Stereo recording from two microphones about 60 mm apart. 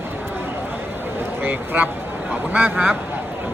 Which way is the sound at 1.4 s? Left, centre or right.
Right.